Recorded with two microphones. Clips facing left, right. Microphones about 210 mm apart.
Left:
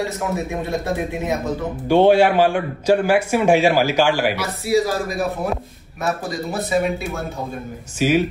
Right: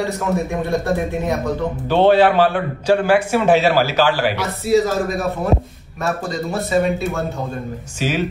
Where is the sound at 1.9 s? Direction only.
10° left (ahead or behind).